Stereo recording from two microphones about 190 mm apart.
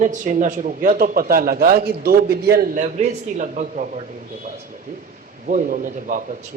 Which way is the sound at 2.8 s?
40° right (ahead or behind).